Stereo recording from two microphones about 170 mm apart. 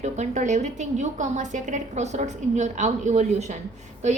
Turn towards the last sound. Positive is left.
turn(degrees=-40)  # may be behind; listen again after turning